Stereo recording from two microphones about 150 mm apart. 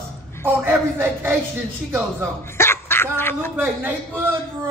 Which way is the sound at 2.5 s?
15° left (ahead or behind).